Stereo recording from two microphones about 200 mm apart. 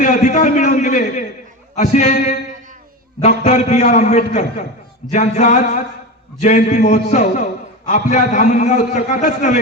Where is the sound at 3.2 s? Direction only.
35° left (ahead or behind).